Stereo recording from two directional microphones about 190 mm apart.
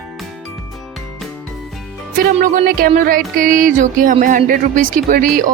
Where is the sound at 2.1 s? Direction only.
45° right (ahead or behind).